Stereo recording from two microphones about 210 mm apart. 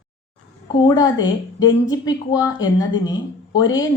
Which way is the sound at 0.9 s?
20° left (ahead or behind).